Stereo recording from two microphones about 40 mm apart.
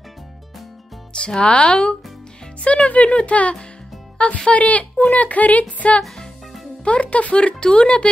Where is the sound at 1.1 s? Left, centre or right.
Left.